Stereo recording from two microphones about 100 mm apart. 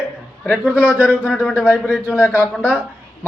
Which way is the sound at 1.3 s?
5° left (ahead or behind).